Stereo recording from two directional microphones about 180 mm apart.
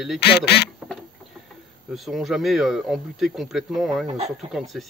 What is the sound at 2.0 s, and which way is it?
Speech, centre (ahead or behind).